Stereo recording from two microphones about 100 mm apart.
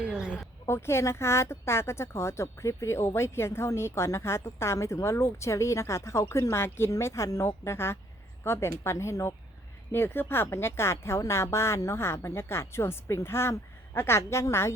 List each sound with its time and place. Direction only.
0.0 s a woman's voice: 10° right (ahead or behind)
0.7 s speech: 25° left (ahead or behind)